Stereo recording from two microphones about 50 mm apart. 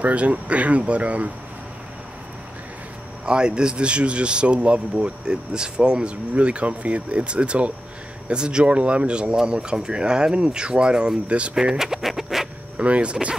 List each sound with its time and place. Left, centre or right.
0.0 s speech: right
3.3 s speech: centre
11.5 s speech: centre
12.7 s speech: right